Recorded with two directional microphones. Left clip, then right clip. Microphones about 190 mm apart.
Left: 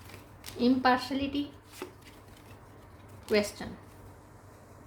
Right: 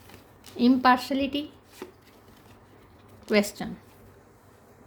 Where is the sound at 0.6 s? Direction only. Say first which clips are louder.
Right 5 dB; 55° right (ahead or behind).